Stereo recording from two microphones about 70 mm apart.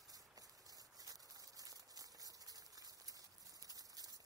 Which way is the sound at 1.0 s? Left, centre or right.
Right.